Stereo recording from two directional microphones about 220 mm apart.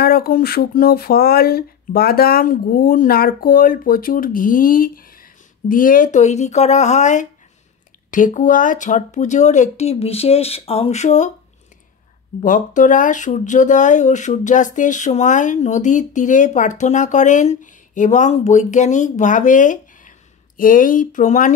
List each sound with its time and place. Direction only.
0.0 s speech: 45° left (ahead or behind)
12.4 s speech: 35° left (ahead or behind)